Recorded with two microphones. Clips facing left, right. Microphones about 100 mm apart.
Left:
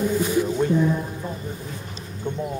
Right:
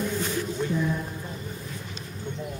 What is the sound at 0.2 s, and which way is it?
Music, 10° left (ahead or behind).